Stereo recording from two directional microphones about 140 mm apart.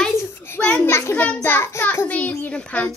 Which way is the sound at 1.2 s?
10° left (ahead or behind).